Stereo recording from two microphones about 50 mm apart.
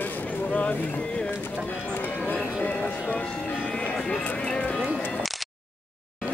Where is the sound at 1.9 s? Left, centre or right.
Left.